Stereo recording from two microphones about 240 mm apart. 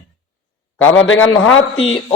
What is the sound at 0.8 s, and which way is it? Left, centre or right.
A man's voice, left.